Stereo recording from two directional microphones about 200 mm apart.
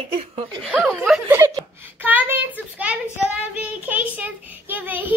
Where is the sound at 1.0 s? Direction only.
5° right (ahead or behind).